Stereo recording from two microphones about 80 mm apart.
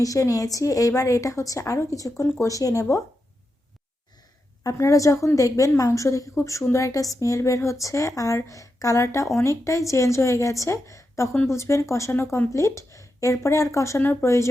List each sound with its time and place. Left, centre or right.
0.0 s a woman's voice: left
4.6 s a woman's voice: left
14.0 s speech: left
14.3 s a woman's voice: left